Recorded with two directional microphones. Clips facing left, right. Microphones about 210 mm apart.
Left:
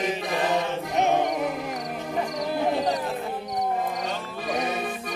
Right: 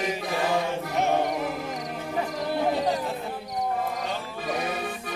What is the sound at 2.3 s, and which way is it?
Music, 5° right (ahead or behind).